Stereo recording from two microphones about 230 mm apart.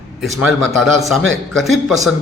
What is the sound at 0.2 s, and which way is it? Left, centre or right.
A man's voice, centre.